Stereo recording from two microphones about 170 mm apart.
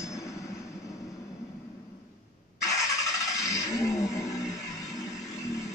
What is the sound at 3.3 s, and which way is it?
Music, 20° left (ahead or behind).